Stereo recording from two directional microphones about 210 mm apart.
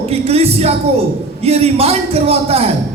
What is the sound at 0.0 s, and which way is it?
Speech, 30° right (ahead or behind).